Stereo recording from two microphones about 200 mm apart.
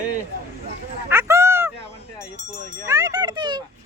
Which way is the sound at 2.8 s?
15° right (ahead or behind).